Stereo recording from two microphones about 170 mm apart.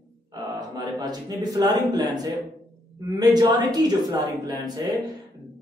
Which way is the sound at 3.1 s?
25° right (ahead or behind).